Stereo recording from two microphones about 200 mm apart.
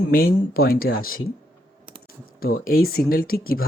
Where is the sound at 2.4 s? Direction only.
45° left (ahead or behind).